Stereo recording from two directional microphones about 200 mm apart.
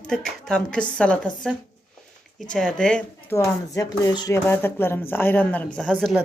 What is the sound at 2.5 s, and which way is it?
Speech, 5° left (ahead or behind).